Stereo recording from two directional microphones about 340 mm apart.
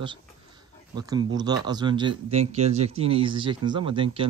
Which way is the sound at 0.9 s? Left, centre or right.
Centre.